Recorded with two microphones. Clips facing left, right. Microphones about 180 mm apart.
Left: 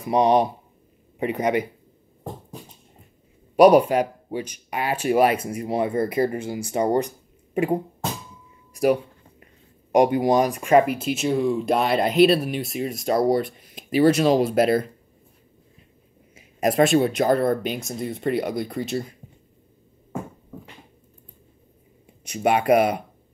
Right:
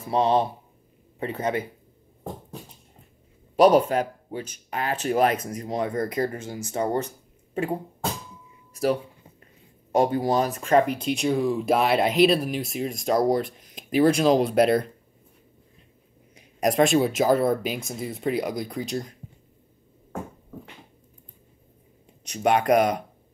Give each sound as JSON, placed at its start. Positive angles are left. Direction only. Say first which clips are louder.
{"t": 0.0, "sound": "speech", "louder": "left 3 dB", "side_deg": 15}
{"t": 3.5, "sound": "speech", "louder": "left 3 dB", "side_deg": 10}
{"t": 8.7, "sound": "a sound", "louder": "left 4 dB", "side_deg": 15}
{"t": 9.9, "sound": "speech", "louder": "left 4 dB", "side_deg": 15}
{"t": 16.3, "sound": "speech", "louder": "left 2 dB", "side_deg": 5}
{"t": 22.2, "sound": "speech", "louder": "left 1 dB", "side_deg": 10}